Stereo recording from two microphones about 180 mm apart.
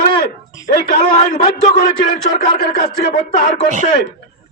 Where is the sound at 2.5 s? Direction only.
50° left (ahead or behind).